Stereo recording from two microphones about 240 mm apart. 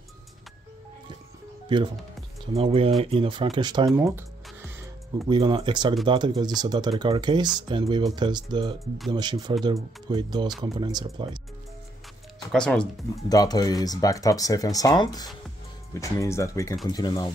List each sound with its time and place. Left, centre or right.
2.4 s speech: right
5.3 s speech: right
12.5 s speech: centre
13.3 s speech: centre